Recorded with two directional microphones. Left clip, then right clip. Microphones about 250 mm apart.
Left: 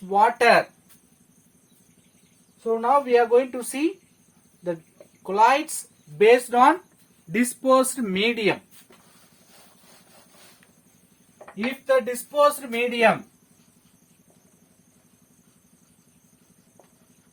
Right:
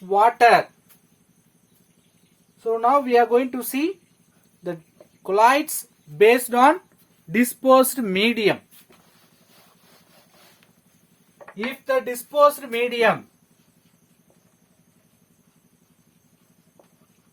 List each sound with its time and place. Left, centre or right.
0.1 s speech: right
2.8 s speech: right
5.2 s speech: right
7.3 s speech: right
11.9 s speech: right